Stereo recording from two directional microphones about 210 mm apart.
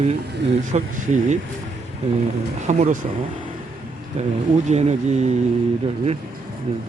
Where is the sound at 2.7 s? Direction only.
35° right (ahead or behind).